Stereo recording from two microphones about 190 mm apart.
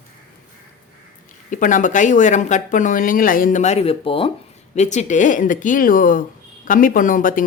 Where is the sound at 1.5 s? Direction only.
45° left (ahead or behind).